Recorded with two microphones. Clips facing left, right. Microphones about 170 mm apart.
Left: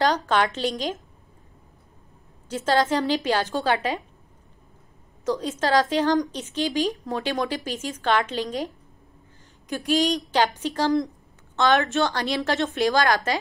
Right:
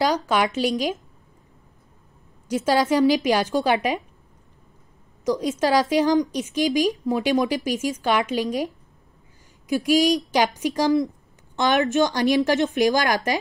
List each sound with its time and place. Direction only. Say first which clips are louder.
0.0 s a woman's voice: right 1 dB; 10° right (ahead or behind)
2.4 s a woman's voice: right 2 dB; 10° right (ahead or behind)
5.2 s a woman's voice: right 3 dB; 15° right (ahead or behind)
9.7 s a woman's voice: right 4 dB; 10° right (ahead or behind)